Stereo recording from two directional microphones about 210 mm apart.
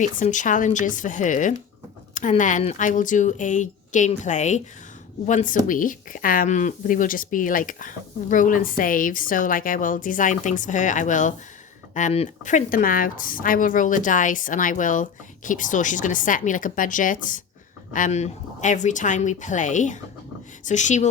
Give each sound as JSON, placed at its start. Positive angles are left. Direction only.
{"t": 0.0, "sound": "speech", "side_deg": 35}